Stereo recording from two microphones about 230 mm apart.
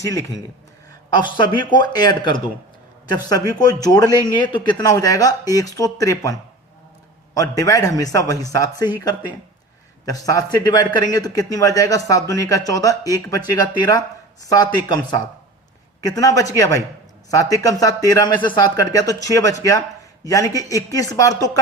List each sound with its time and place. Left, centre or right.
0.0 s a man's voice: centre